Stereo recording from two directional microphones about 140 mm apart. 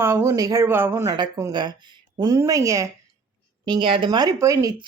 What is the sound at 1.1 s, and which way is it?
Speech, 30° right (ahead or behind).